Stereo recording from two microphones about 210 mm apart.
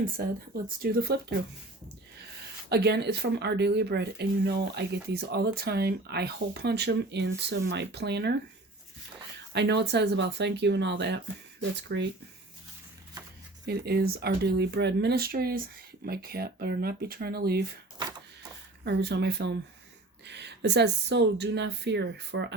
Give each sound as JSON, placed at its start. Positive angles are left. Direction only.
{"t": 0.0, "sound": "speech", "side_deg": -40}
{"t": 2.6, "sound": "speech", "side_deg": -50}
{"t": 9.5, "sound": "speech", "side_deg": -55}
{"t": 13.7, "sound": "speech", "side_deg": -50}
{"t": 18.9, "sound": "speech", "side_deg": -50}